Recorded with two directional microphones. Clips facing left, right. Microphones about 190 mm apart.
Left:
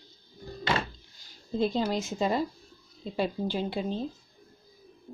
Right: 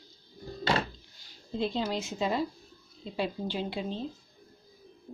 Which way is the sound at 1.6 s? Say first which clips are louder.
Left 3 dB; 45° left (ahead or behind).